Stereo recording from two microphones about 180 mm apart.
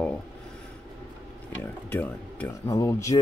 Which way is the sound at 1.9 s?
10° left (ahead or behind).